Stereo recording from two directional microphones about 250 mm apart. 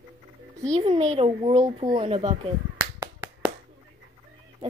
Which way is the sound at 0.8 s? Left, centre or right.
Right.